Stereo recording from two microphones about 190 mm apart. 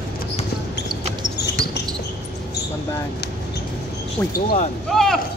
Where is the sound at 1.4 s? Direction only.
60° left (ahead or behind).